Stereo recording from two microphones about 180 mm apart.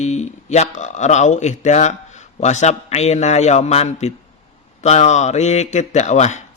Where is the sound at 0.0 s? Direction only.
40° left (ahead or behind).